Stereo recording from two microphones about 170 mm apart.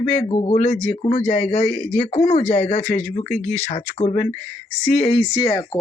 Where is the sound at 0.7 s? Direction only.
5° left (ahead or behind).